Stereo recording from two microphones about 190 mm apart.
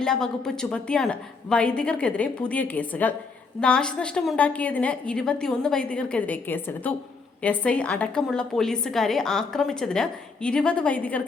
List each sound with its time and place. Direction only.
0.0 s a woman's voice: 5° left (ahead or behind)